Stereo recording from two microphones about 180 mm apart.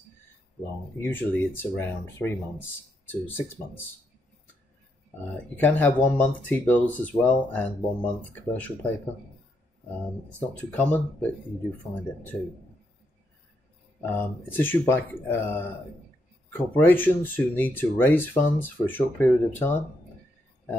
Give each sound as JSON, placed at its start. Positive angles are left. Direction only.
{"t": 1.0, "sound": "speech", "side_deg": 10}
{"t": 5.6, "sound": "speech", "side_deg": 10}
{"t": 10.8, "sound": "speech", "side_deg": 10}
{"t": 14.0, "sound": "speech", "side_deg": 10}